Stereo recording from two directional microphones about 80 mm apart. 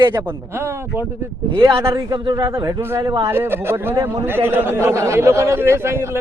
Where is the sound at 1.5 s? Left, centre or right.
Right.